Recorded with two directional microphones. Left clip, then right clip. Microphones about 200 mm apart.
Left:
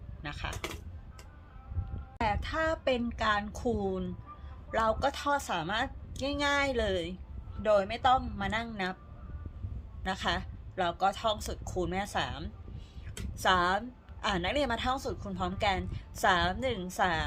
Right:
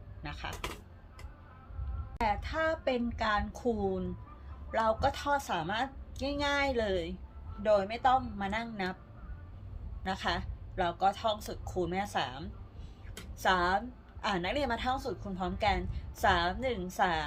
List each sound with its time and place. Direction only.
0.2 s a sound: 30° left (ahead or behind)
2.2 s a woman's voice: 25° left (ahead or behind)
10.0 s a woman's voice: 30° left (ahead or behind)